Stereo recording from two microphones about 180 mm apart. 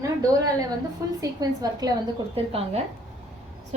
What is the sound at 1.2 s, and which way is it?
Speech, 20° right (ahead or behind).